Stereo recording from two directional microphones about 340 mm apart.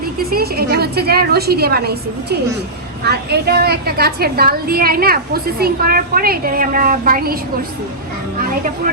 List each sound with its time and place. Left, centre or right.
0.0 s a woman's voice: right